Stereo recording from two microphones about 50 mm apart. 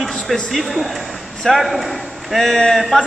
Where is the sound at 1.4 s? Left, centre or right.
Centre.